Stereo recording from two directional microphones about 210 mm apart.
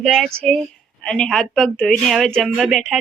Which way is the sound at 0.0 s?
Centre (ahead or behind).